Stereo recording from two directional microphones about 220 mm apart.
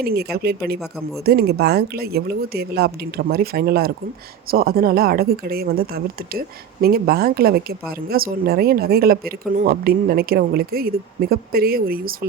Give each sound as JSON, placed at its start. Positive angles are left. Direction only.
{"t": 0.0, "sound": "speech", "side_deg": -45}
{"t": 0.8, "sound": "speech", "side_deg": 0}
{"t": 1.2, "sound": "speech", "side_deg": -45}